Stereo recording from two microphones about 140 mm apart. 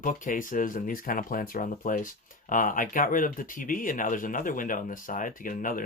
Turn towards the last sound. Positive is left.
turn(degrees=80)